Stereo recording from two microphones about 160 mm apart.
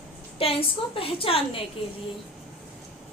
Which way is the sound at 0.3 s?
35° left (ahead or behind).